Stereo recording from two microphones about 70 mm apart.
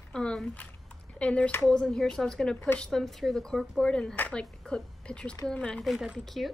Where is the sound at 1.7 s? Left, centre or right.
Centre.